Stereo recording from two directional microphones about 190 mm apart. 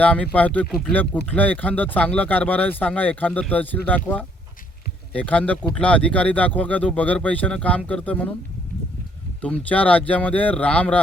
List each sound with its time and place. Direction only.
0.0 s speech: 5° left (ahead or behind)
9.4 s speech: 5° left (ahead or behind)